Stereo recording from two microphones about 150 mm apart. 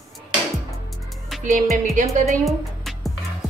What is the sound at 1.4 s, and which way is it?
Music, 60° right (ahead or behind).